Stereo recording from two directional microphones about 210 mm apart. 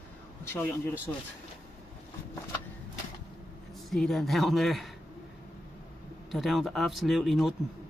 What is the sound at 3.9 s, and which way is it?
Speech, centre (ahead or behind).